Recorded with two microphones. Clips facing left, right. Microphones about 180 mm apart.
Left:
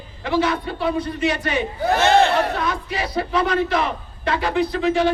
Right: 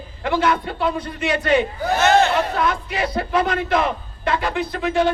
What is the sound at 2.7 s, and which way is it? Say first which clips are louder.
A man's voice: right 2 dB; 50° right (ahead or behind).